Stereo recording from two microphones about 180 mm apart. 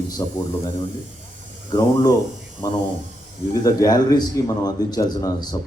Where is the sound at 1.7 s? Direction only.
25° left (ahead or behind).